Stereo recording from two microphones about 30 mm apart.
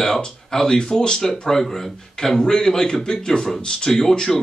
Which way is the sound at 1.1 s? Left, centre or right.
Centre.